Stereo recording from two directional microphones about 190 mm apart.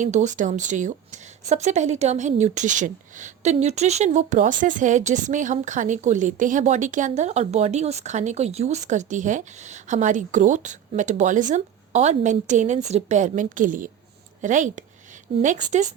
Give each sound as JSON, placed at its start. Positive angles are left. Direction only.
{"t": 0.0, "sound": "a woman's voice", "side_deg": -40}